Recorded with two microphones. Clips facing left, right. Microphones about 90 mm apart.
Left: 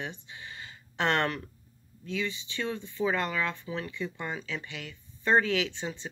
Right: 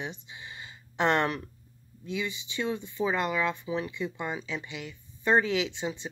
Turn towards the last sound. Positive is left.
turn(degrees=-15)  # may be behind; listen again after turning